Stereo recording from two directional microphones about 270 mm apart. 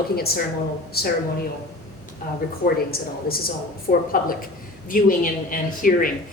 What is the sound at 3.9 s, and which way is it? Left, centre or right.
Speech, left.